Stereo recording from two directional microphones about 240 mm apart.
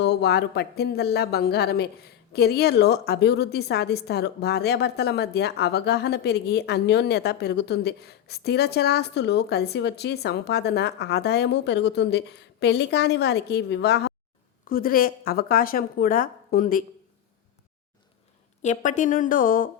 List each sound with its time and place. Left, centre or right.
0.0 s a woman's voice: left
18.6 s a woman's voice: left